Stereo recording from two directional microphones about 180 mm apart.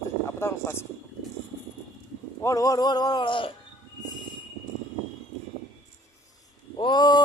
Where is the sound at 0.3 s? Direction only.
15° left (ahead or behind).